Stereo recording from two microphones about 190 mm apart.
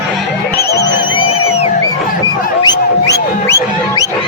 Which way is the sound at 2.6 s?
20° left (ahead or behind).